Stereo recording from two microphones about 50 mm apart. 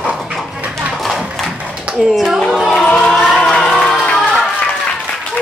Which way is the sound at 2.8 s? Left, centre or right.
Left.